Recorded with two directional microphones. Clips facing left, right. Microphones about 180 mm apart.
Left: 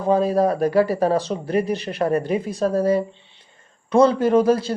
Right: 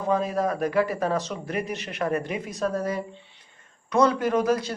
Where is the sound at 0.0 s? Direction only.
35° left (ahead or behind).